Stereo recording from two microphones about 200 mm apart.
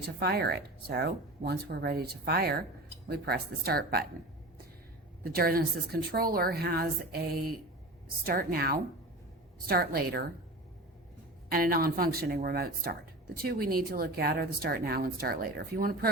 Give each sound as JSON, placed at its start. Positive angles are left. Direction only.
{"t": 0.2, "sound": "speech", "side_deg": -55}
{"t": 5.2, "sound": "speech", "side_deg": -50}
{"t": 8.2, "sound": "speech", "side_deg": -45}
{"t": 11.4, "sound": "speech", "side_deg": -45}